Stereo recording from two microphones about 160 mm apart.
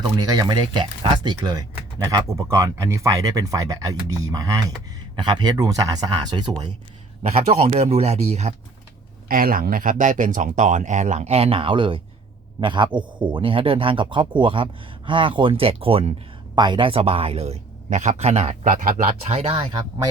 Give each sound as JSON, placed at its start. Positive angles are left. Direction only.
{"t": 0.2, "sound": "speech", "side_deg": -25}
{"t": 7.2, "sound": "speech", "side_deg": -40}
{"t": 9.3, "sound": "speech", "side_deg": -60}
{"t": 18.6, "sound": "speech", "side_deg": -60}
{"t": 19.4, "sound": "speech", "side_deg": -35}